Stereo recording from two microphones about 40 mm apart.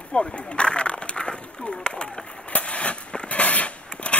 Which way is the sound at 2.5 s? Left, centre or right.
Left.